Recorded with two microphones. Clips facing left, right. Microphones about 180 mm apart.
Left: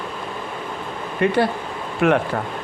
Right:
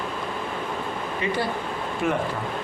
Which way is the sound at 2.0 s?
70° left (ahead or behind).